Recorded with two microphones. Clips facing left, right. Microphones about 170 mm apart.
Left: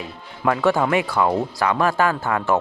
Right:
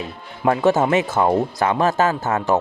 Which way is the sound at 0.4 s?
20° right (ahead or behind).